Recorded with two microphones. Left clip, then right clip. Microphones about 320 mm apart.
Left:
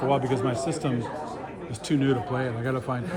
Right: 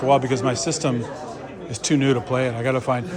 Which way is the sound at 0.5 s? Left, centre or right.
Right.